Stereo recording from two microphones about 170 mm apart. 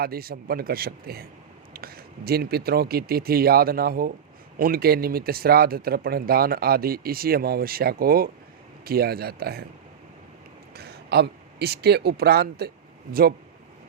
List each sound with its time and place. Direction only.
0.0 s speech: 60° right (ahead or behind)
10.8 s speech: 70° right (ahead or behind)